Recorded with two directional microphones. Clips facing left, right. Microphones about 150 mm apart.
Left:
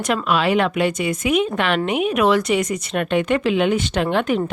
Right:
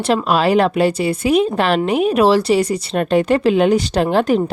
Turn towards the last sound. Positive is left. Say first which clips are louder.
# right 4 dB
turn(degrees=-35)  # may be behind; listen again after turning